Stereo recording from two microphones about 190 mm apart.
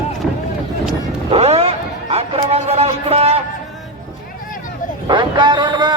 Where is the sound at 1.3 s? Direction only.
30° right (ahead or behind).